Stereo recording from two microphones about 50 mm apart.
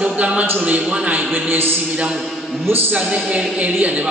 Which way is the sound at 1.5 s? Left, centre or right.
Right.